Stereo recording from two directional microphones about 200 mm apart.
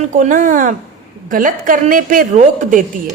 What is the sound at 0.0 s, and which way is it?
A woman's voice, 40° right (ahead or behind).